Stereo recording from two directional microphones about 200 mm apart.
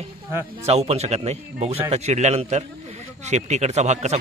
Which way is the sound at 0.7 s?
30° right (ahead or behind).